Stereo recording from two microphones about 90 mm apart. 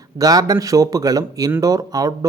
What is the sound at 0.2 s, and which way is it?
A man's voice, 45° right (ahead or behind).